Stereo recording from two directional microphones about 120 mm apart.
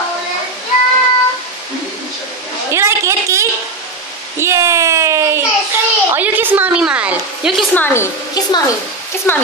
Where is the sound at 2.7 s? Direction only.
25° right (ahead or behind).